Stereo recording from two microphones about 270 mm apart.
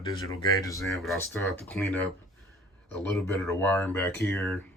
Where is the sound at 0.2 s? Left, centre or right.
Centre.